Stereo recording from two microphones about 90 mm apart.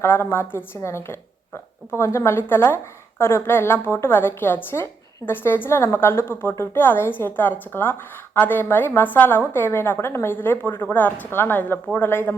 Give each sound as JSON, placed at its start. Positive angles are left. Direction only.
{"t": 0.0, "sound": "a woman's voice", "side_deg": 25}